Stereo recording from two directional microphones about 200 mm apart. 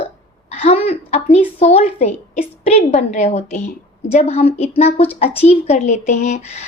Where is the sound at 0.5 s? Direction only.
30° left (ahead or behind).